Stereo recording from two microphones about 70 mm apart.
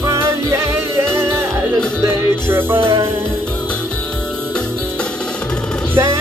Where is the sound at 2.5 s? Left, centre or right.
Right.